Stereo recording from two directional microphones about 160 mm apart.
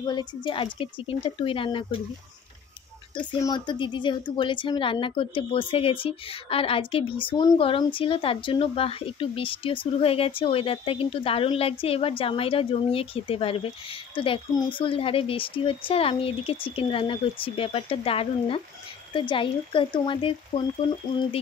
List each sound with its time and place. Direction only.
0.0 s a woman's voice: 25° left (ahead or behind)
3.2 s a woman's voice: 30° left (ahead or behind)